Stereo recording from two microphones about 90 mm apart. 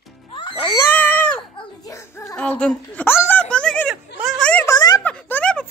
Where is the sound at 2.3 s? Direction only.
10° left (ahead or behind).